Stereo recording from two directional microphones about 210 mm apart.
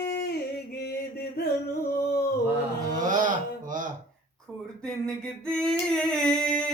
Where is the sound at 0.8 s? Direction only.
50° left (ahead or behind).